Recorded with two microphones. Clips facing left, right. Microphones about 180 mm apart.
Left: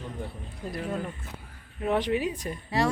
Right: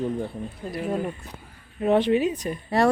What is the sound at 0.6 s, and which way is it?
Speech, 25° right (ahead or behind).